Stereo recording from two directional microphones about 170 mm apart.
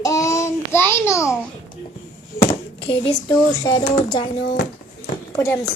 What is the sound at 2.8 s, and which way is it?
Speech, 30° left (ahead or behind).